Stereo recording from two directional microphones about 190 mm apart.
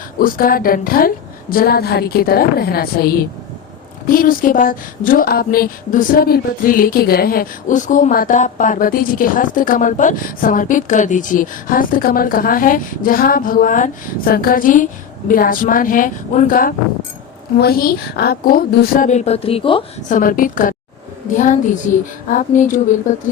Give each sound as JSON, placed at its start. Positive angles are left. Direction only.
{"t": 0.2, "sound": "speech", "side_deg": 50}
{"t": 20.1, "sound": "a woman's voice", "side_deg": 45}